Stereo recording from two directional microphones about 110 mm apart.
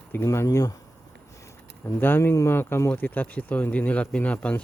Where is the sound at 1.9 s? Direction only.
20° left (ahead or behind).